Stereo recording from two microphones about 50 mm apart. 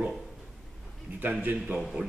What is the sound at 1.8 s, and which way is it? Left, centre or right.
Speech, centre.